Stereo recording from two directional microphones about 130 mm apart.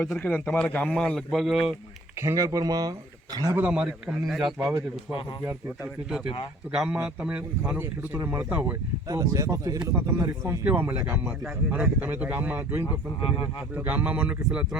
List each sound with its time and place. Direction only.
0.2 s a man's voice: 15° left (ahead or behind); by 1.7 s centre (ahead or behind)
2.1 s speech: 25° right (ahead or behind)
3.5 s a man's voice: 10° right (ahead or behind)
4.5 s speech: 20° right (ahead or behind)
5.6 s a man's voice: 5° right (ahead or behind)
9.0 s speech: 25° right (ahead or behind); by 14.8 s 10° right (ahead or behind)